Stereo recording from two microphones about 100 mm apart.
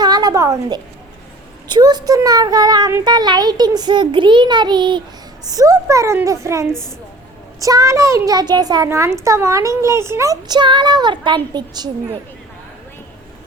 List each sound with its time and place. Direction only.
0.0 s a sound: 45° right (ahead or behind)
1.7 s a child's voice: 45° right (ahead or behind)
5.5 s speech: 35° right (ahead or behind)
8.9 s speech: 30° right (ahead or behind)
10.5 s a child's voice: 50° right (ahead or behind)